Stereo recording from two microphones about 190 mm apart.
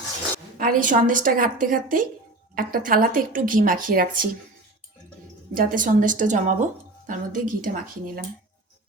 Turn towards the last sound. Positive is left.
turn(degrees=-45)  # may be behind; listen again after turning